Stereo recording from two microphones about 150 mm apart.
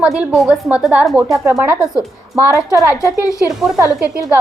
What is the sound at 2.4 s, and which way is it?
Speech, 20° right (ahead or behind).